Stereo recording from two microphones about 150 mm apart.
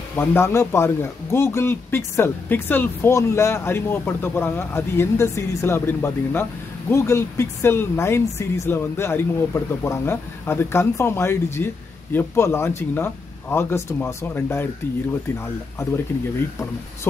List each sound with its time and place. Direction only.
0.1 s speech: 15° left (ahead or behind)